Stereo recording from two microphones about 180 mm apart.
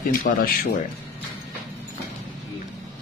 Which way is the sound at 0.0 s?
50° left (ahead or behind).